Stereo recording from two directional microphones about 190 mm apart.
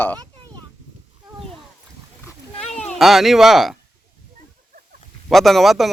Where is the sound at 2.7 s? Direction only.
35° left (ahead or behind).